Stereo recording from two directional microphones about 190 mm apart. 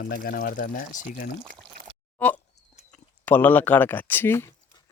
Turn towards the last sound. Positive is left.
turn(degrees=10)  # may be behind; listen again after turning